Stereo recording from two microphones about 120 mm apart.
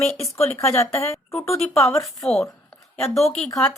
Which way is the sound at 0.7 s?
25° left (ahead or behind).